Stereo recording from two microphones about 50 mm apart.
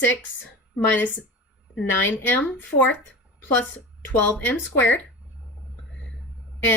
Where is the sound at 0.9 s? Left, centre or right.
Left.